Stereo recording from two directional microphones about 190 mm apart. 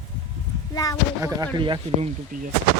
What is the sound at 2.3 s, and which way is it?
Speech, 45° right (ahead or behind).